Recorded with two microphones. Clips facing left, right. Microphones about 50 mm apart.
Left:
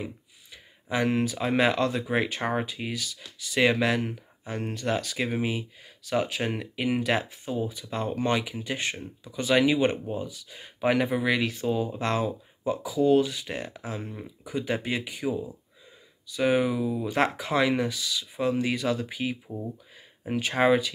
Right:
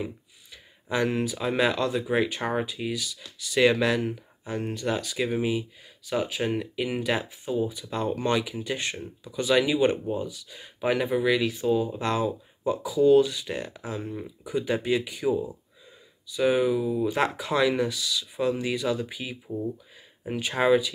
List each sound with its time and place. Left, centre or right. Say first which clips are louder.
0.0 s speech: right 3 dB; left
3.2 s speech: right 2 dB; left
7.9 s speech: even; left
9.4 s speech: even; left
10.8 s speech: even; left
16.3 s speech: right 1 dB; left
18.6 s speech: even; left